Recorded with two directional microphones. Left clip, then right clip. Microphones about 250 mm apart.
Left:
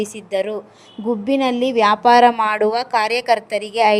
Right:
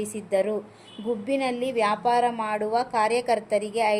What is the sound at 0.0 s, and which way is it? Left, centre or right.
A woman's voice, left.